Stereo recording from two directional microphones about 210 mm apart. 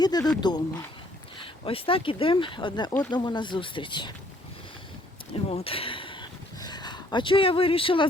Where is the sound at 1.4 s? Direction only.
25° left (ahead or behind).